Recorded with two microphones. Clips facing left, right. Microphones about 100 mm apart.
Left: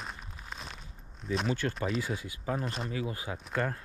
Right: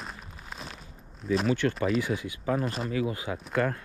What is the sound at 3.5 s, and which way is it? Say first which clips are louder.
Speech: right 5 dB; 70° right (ahead or behind).